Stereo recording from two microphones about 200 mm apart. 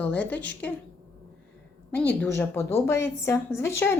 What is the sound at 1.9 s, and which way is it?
A woman's voice, 10° left (ahead or behind).